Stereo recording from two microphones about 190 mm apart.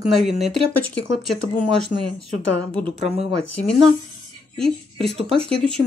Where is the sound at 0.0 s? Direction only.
Centre (ahead or behind).